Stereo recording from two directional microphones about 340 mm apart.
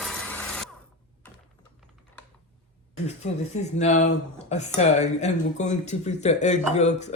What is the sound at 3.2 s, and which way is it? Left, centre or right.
Speech, centre.